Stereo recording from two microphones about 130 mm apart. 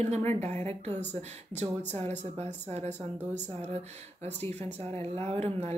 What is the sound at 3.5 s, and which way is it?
Speech, 50° right (ahead or behind).